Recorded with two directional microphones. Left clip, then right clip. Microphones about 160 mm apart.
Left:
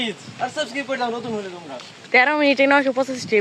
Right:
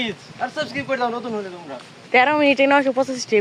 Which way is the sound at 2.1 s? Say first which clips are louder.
Even; 5° right (ahead or behind).